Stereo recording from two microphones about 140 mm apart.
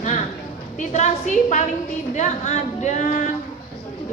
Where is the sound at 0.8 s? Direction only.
60° left (ahead or behind).